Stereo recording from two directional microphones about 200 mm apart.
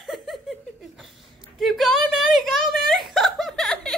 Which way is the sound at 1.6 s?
Centre (ahead or behind).